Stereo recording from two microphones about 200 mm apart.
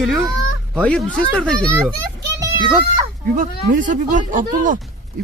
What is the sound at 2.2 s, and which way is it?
Children playing, 15° right (ahead or behind).